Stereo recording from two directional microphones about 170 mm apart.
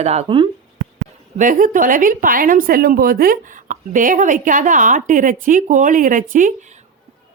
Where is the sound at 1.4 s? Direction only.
50° right (ahead or behind).